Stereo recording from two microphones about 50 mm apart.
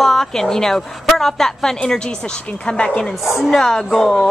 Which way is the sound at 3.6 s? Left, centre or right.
Centre.